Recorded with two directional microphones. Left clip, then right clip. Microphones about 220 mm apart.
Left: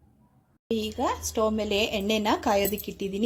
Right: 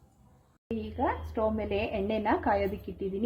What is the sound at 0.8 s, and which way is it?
A woman's voice, 40° left (ahead or behind).